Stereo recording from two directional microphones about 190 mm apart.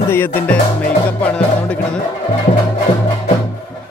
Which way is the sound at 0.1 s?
10° left (ahead or behind).